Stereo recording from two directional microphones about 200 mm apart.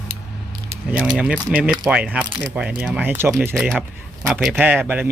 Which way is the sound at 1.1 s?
5° right (ahead or behind).